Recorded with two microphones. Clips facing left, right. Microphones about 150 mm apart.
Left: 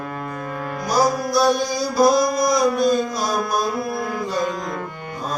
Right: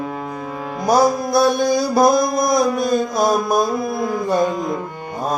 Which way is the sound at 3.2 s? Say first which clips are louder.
Right 6 dB; 50° right (ahead or behind).